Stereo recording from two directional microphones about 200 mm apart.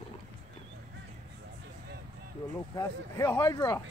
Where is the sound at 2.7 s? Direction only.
15° left (ahead or behind).